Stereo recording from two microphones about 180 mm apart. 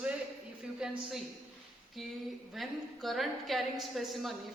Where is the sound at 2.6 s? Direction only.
Centre (ahead or behind).